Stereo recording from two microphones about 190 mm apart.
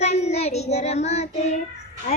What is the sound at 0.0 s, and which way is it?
Child singing, 35° left (ahead or behind).